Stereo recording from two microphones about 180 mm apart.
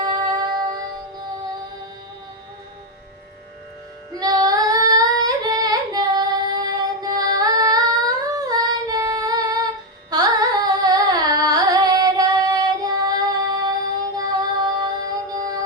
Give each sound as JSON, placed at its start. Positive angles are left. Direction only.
{"t": 0.0, "sound": "music", "side_deg": -20}
{"t": 4.1, "sound": "child singing", "side_deg": -20}
{"t": 10.1, "sound": "singing", "side_deg": -20}
{"t": 14.2, "sound": "music", "side_deg": -20}